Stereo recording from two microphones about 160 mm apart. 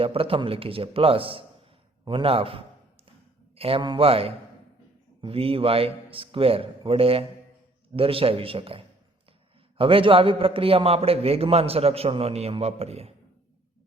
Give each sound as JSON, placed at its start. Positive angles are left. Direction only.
{"t": 0.0, "sound": "a man's voice", "side_deg": -35}